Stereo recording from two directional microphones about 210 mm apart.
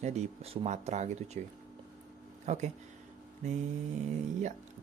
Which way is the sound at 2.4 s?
35° right (ahead or behind).